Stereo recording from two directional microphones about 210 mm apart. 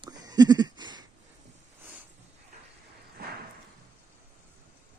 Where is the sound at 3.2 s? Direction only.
45° right (ahead or behind).